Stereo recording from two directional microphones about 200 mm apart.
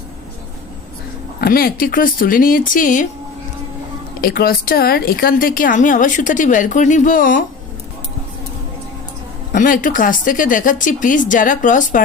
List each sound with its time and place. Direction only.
1.4 s a woman's voice: 50° left (ahead or behind)
4.2 s a woman's voice: 50° left (ahead or behind)
9.5 s speech: 40° left (ahead or behind)